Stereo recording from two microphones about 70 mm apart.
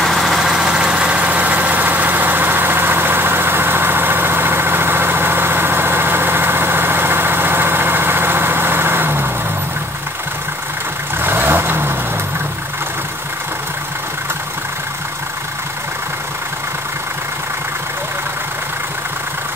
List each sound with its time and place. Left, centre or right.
0.0 s vehicle: centre; by 9.3 s right
11.1 s vehicle: right